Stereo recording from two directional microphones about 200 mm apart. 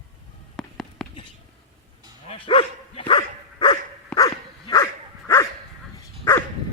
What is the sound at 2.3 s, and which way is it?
Dog, 25° left (ahead or behind).